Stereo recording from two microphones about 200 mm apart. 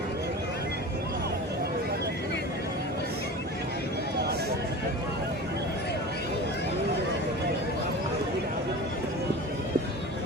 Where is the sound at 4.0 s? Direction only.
55° right (ahead or behind).